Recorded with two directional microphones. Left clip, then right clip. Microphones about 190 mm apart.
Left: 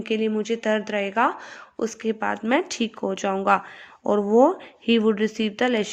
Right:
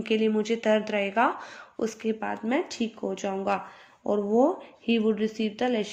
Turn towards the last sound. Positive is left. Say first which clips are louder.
# left 5 dB
turn(degrees=35)  # may be behind; listen again after turning